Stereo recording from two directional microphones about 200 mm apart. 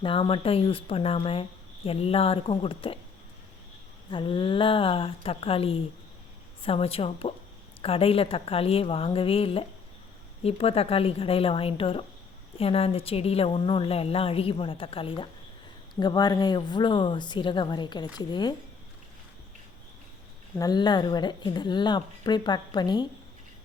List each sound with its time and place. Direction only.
0.0 s speech: 25° left (ahead or behind)
4.1 s speech: 25° left (ahead or behind)
20.6 s speech: 20° left (ahead or behind)